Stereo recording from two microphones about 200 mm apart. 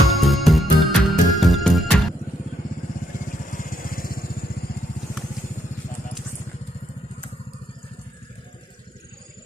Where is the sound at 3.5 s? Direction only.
45° left (ahead or behind).